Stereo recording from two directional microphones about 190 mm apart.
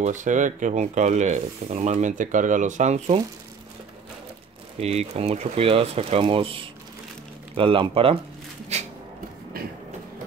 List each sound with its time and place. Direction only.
0.0 s speech: 40° right (ahead or behind)
4.7 s speech: 35° right (ahead or behind)
8.7 s a sound: 35° right (ahead or behind)
9.6 s train: 50° right (ahead or behind)